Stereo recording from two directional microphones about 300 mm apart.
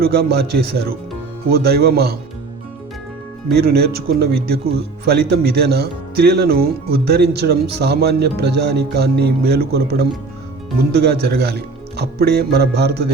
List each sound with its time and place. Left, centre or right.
0.0 s speech: right
3.5 s speech: right